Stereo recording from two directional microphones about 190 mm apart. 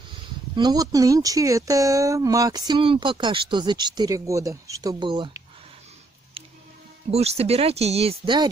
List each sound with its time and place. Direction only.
0.2 s speech: 20° right (ahead or behind)
7.1 s speech: 35° right (ahead or behind)